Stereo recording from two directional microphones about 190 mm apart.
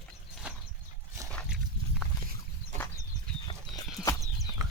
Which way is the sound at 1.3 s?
Centre (ahead or behind).